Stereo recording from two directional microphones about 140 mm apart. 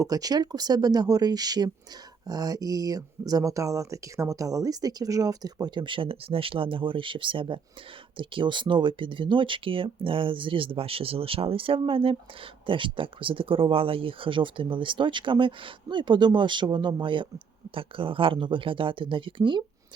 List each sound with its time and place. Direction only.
0.0 s speech: 25° right (ahead or behind)